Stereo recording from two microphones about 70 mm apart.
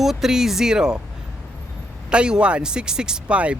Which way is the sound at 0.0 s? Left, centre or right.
Centre.